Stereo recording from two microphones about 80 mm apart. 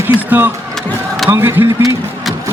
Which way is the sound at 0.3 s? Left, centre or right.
Right.